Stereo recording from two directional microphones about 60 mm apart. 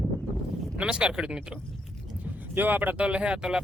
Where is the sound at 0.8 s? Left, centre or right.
Centre.